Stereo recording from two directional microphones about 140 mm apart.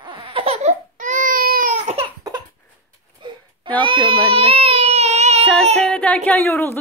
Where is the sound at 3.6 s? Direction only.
35° right (ahead or behind).